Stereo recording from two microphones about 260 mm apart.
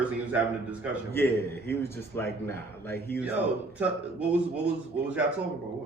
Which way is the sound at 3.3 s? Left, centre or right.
Centre.